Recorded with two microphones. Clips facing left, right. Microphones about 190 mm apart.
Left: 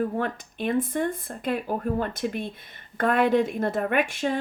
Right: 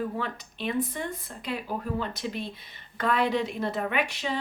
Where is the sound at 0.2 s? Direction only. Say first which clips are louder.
Left 5 dB; 50° left (ahead or behind).